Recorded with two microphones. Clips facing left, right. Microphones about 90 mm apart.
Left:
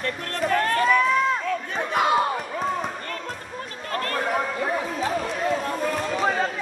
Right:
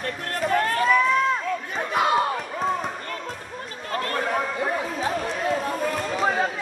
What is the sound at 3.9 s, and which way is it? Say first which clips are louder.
Chatter: even; 25° right (ahead or behind).